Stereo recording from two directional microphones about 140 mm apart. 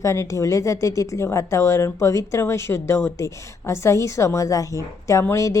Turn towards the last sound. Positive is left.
turn(degrees=20)  # may be behind; listen again after turning